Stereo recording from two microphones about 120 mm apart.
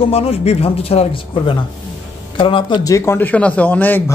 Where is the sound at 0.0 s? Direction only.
55° left (ahead or behind).